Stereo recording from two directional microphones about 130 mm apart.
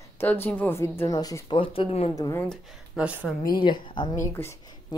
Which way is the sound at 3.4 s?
35° left (ahead or behind).